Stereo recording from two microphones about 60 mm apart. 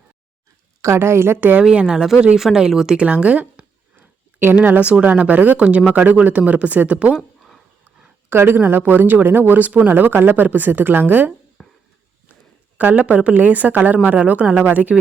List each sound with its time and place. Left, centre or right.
0.8 s a woman's voice: right
1.4 s a woman's voice: right
1.7 s a woman's voice: centre
8.3 s speech: right
11.6 s a sound: centre
12.7 s a woman's voice: right